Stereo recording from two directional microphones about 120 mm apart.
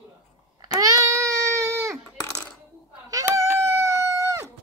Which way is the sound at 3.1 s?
25° right (ahead or behind).